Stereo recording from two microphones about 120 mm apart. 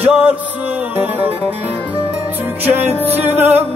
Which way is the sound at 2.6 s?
15° right (ahead or behind).